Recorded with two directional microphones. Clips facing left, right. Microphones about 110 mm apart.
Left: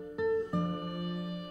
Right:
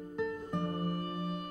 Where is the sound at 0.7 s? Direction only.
35° right (ahead or behind).